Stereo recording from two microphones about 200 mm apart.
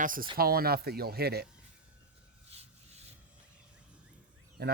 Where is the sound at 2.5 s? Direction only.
30° right (ahead or behind).